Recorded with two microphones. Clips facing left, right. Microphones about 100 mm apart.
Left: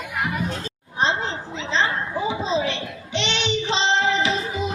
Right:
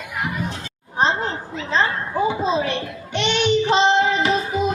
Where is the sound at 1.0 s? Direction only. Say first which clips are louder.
Right 3 dB; 40° right (ahead or behind).